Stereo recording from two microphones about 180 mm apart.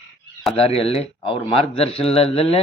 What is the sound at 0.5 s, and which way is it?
A man's voice, 35° left (ahead or behind).